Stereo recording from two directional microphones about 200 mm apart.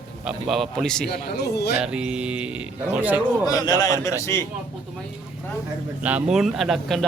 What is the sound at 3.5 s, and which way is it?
Speech, 20° left (ahead or behind).